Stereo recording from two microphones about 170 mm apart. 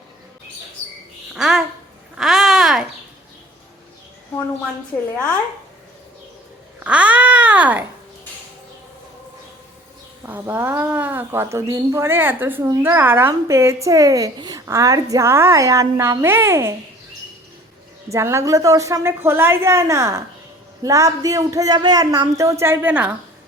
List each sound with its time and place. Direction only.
1.3 s speech: 5° right (ahead or behind)
2.1 s a sound: centre (ahead or behind)
6.7 s babbling: 5° right (ahead or behind)
10.2 s speech: 10° right (ahead or behind)
18.1 s speech: 15° right (ahead or behind)